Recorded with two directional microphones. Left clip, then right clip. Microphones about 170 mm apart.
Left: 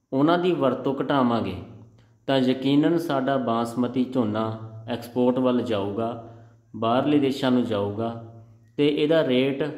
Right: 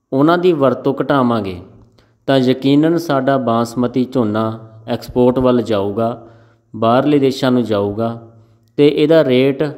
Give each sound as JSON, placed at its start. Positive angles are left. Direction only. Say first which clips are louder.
{"t": 0.1, "sound": "speech", "louder": "right 9 dB", "side_deg": -35}